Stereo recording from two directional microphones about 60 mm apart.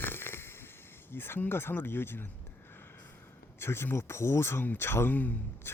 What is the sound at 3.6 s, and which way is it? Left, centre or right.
Speech, left.